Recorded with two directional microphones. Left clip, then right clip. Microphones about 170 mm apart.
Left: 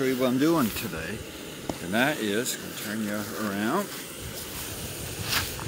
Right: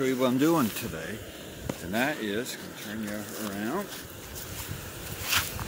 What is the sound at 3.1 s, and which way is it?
Speech, 45° left (ahead or behind).